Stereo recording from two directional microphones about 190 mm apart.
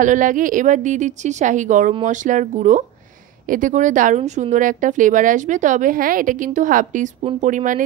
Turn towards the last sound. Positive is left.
turn(degrees=-45)  # may be behind; listen again after turning